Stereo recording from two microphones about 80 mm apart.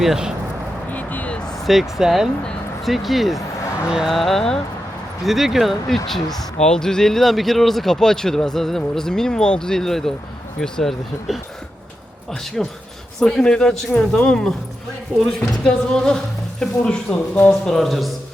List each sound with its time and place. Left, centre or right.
0.0 s speech: centre
0.9 s vehicle: left
1.6 s speech: centre
6.3 s speech: centre
12.6 s a woman's voice: centre